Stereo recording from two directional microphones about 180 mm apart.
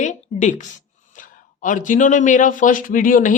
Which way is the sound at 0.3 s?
40° left (ahead or behind).